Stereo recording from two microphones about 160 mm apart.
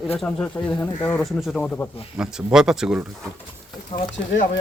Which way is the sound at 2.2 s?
5° right (ahead or behind).